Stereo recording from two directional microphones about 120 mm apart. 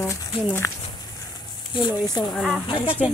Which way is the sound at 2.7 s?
45° left (ahead or behind).